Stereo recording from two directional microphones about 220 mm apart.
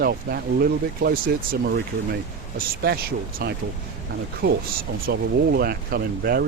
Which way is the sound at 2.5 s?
45° right (ahead or behind).